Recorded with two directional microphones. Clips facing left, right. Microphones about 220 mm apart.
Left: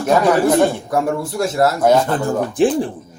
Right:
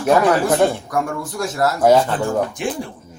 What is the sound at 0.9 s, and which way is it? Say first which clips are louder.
A man's voice: left 4 dB; 25° left (ahead or behind).